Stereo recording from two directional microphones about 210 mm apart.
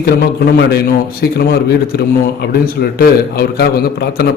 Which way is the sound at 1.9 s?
50° left (ahead or behind).